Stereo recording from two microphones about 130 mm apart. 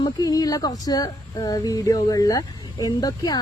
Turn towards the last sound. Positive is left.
turn(degrees=30)  # may be behind; listen again after turning